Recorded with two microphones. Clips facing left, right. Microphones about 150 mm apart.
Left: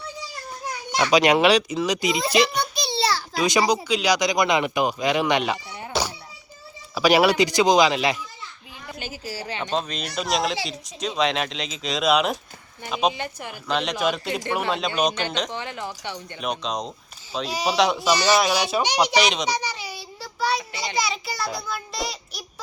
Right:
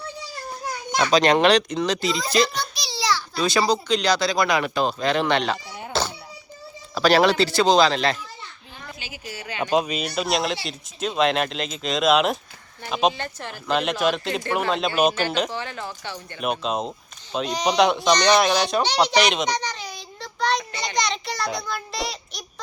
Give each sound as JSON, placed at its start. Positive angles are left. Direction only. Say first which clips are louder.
{"t": 1.1, "sound": "speech", "louder": "even", "side_deg": 10}
{"t": 5.9, "sound": "a sound", "louder": "even", "side_deg": 10}
{"t": 6.9, "sound": "speech", "louder": "even", "side_deg": 10}
{"t": 9.0, "sound": "speech", "louder": "left 6 dB", "side_deg": 45}
{"t": 9.7, "sound": "speech", "louder": "right 6 dB", "side_deg": -10}
{"t": 13.1, "sound": "speech", "louder": "even", "side_deg": 15}
{"t": 13.7, "sound": "speech", "louder": "right 2 dB", "side_deg": -5}
{"t": 15.4, "sound": "speech", "louder": "even", "side_deg": 20}
{"t": 16.4, "sound": "a child's voice", "louder": "right 3 dB", "side_deg": -5}